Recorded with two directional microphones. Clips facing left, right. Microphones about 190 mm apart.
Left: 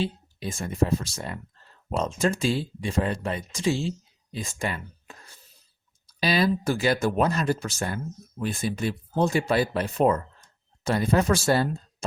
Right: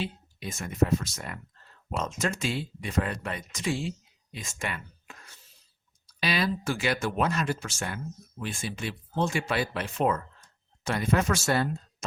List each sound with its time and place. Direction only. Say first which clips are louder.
0.0 s speech: left 5 dB; 30° left (ahead or behind)